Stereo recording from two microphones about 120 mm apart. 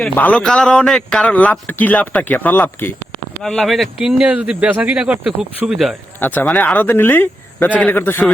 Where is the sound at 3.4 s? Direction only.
5° left (ahead or behind).